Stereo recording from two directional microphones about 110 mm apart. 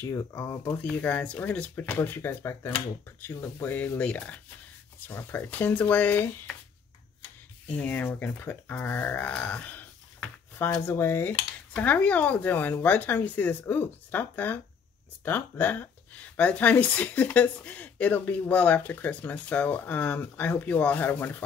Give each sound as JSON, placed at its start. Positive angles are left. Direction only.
{"t": 0.1, "sound": "speech", "side_deg": 25}
{"t": 0.8, "sound": "speech", "side_deg": 10}
{"t": 7.6, "sound": "speech", "side_deg": 15}